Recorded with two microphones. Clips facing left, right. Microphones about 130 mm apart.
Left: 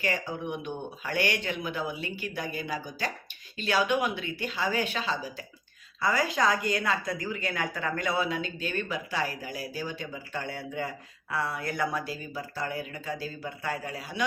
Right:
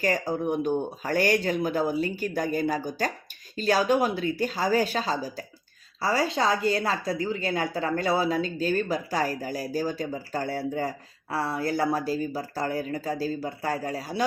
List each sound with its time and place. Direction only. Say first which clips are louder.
0.0 s a woman's voice: right 6 dB; 40° right (ahead or behind)